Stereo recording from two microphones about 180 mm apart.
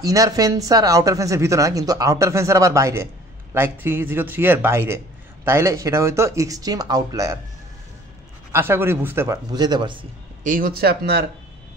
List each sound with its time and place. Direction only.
0.0 s a man's voice: 20° right (ahead or behind)
8.5 s a man's voice: 15° right (ahead or behind)
10.4 s speech: 50° right (ahead or behind)